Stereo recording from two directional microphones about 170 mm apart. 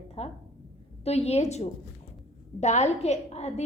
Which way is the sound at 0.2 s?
40° left (ahead or behind).